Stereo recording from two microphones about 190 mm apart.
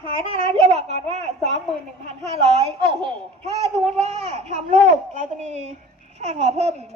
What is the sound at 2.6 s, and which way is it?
A child's voice, 30° right (ahead or behind).